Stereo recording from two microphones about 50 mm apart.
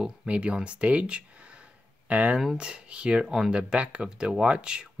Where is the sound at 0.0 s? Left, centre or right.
Centre.